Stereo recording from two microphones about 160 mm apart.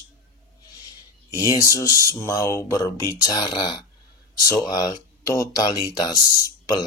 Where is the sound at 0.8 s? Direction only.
20° left (ahead or behind).